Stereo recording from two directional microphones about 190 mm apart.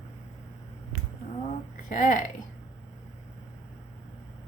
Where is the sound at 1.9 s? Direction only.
45° left (ahead or behind).